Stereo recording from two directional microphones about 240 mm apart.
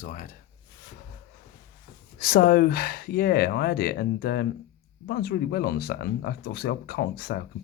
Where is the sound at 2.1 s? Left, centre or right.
Left.